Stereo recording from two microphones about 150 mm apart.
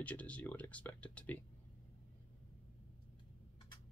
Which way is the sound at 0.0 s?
10° left (ahead or behind).